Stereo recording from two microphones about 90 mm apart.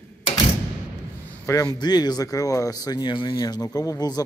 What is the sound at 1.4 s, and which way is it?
Speech, 45° left (ahead or behind).